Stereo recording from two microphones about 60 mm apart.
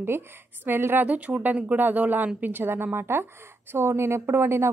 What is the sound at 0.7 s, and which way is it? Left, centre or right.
Speech, right.